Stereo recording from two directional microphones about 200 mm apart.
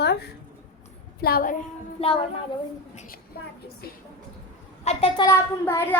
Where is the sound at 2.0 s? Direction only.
30° left (ahead or behind).